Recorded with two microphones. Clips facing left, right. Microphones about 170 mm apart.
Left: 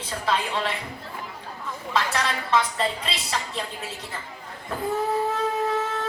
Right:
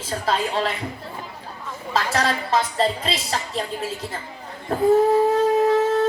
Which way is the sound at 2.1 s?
40° right (ahead or behind).